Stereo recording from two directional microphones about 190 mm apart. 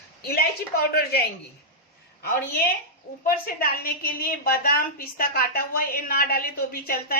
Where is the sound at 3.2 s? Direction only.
50° left (ahead or behind).